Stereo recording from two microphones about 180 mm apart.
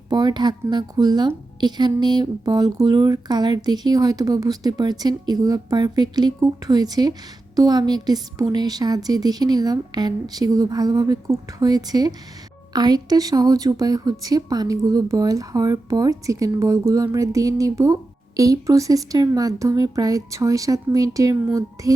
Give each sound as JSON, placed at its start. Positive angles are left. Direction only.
{"t": 0.1, "sound": "a woman's voice", "side_deg": -25}